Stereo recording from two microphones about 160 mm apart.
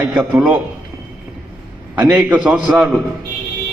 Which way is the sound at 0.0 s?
5° right (ahead or behind).